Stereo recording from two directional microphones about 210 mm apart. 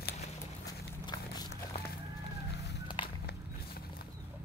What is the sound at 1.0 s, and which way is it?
Dog, 20° left (ahead or behind).